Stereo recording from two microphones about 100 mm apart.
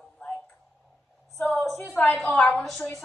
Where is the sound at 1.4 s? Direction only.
15° left (ahead or behind).